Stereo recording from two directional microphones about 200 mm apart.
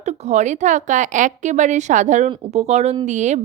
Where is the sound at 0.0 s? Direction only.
35° right (ahead or behind).